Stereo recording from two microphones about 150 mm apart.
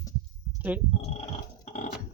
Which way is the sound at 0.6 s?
10° right (ahead or behind).